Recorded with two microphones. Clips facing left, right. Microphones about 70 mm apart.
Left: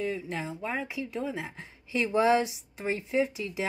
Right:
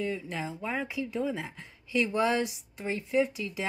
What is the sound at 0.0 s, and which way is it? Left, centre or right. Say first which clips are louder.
Speech: left 1 dB; centre.